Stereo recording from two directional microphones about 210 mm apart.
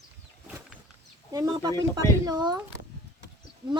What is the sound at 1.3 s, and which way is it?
Speech, 15° right (ahead or behind).